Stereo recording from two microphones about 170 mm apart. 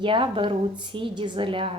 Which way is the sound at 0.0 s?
30° right (ahead or behind).